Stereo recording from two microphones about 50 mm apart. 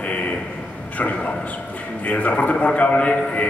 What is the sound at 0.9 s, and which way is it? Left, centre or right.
A man's voice, left.